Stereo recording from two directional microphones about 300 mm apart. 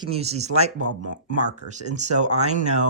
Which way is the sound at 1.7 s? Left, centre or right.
Right.